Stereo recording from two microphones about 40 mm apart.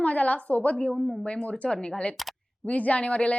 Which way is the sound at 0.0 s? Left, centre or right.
Left.